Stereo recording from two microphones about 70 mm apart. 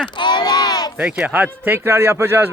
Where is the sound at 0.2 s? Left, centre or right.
Left.